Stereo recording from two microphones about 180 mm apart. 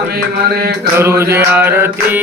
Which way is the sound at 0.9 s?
15° right (ahead or behind).